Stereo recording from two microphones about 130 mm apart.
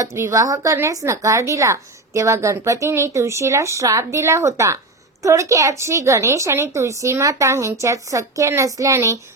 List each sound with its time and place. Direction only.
0.0 s speech: 20° right (ahead or behind)